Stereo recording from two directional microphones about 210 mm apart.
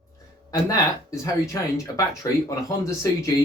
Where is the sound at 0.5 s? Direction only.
15° left (ahead or behind).